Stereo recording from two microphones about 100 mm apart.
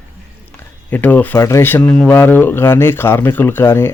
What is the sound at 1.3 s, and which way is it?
Speech, 30° left (ahead or behind).